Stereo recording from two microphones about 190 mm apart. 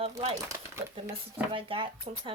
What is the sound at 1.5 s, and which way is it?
Speech, 25° right (ahead or behind).